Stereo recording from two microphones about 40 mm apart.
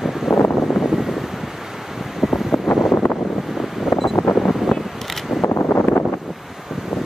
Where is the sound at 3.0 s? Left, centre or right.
Left.